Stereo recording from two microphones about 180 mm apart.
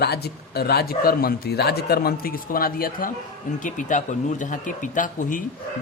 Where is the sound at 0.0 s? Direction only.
65° left (ahead or behind); by 5.4 s 45° left (ahead or behind).